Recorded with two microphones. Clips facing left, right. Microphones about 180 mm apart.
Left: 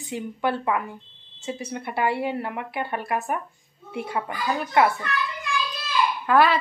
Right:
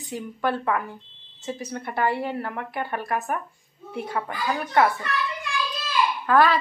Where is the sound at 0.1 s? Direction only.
15° left (ahead or behind).